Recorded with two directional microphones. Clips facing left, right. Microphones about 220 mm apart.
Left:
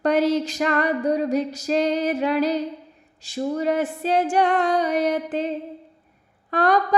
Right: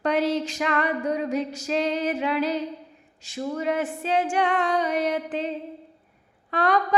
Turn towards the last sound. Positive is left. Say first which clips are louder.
# left 3 dB
turn(degrees=40)  # may be behind; listen again after turning